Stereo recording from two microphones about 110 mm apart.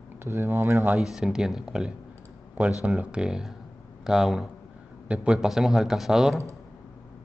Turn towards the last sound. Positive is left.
turn(degrees=-5)  # may be behind; listen again after turning